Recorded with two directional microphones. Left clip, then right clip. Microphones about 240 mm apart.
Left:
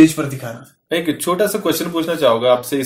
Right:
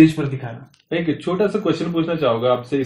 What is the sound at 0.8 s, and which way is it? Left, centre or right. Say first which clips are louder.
Speech: left 4 dB; left.